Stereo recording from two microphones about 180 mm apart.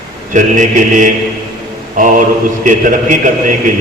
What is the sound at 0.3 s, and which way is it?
A man's voice, 45° right (ahead or behind).